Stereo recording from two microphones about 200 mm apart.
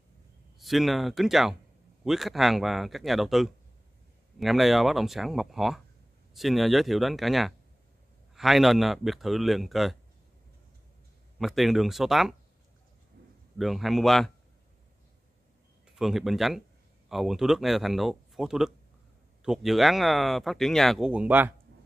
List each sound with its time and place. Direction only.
0.6 s speech: centre (ahead or behind)
11.3 s speech: centre (ahead or behind)
13.2 s a sound: 55° right (ahead or behind)
13.6 s speech: centre (ahead or behind)
15.9 s speech: centre (ahead or behind)